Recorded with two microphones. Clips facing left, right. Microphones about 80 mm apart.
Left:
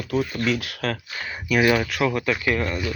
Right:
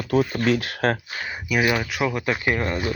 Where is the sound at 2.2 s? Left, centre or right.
Right.